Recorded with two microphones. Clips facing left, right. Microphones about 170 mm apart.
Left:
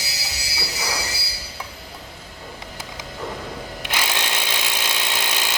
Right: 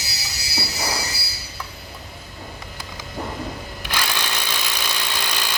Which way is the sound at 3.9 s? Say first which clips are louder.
Even; 20° left (ahead or behind).